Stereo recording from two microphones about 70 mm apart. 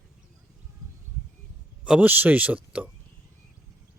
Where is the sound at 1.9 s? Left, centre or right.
Right.